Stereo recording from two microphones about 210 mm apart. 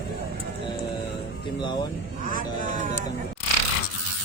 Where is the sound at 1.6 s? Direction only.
20° left (ahead or behind).